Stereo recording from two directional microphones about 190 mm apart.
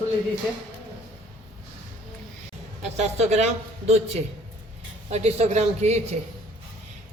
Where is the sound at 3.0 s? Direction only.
35° right (ahead or behind).